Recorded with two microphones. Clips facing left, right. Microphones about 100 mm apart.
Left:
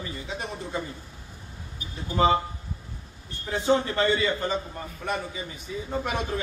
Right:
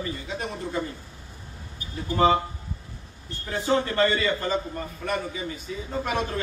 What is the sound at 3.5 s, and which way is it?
A man's voice, 15° left (ahead or behind).